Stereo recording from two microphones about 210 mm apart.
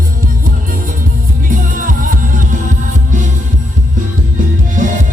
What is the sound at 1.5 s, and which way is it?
Music, 40° right (ahead or behind).